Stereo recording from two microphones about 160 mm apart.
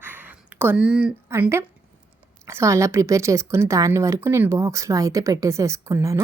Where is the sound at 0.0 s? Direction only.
10° right (ahead or behind).